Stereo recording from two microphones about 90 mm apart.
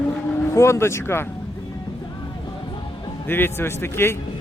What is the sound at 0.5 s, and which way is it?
Speech, 30° left (ahead or behind).